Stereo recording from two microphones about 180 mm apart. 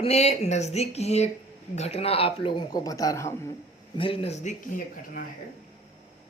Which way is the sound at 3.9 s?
30° left (ahead or behind).